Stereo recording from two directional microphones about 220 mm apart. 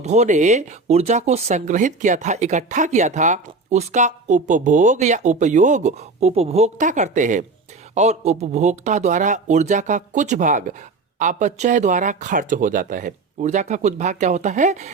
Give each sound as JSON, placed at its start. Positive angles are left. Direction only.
{"t": 0.0, "sound": "speech", "side_deg": -30}